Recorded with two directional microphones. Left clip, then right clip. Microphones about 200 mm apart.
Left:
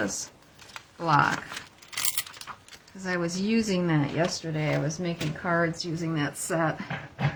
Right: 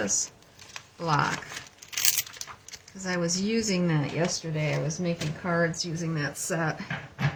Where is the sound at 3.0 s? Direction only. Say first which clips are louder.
Even; 20° left (ahead or behind).